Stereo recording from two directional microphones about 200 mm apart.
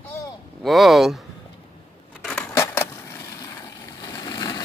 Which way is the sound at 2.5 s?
15° left (ahead or behind).